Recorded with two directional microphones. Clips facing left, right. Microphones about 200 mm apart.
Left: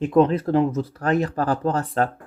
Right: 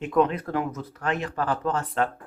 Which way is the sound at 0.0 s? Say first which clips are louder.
Left 5 dB; 35° left (ahead or behind).